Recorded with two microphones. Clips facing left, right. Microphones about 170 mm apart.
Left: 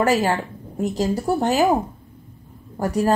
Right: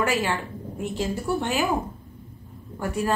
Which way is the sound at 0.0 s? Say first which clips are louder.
Left 6 dB; 40° left (ahead or behind).